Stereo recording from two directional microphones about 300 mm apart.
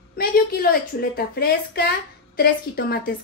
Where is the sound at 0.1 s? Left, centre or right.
Left.